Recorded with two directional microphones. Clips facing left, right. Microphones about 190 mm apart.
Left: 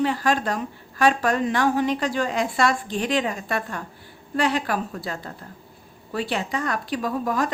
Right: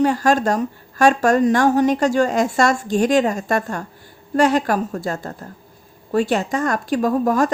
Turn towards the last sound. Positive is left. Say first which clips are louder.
# right 7 dB
turn(degrees=-45)  # may be behind; listen again after turning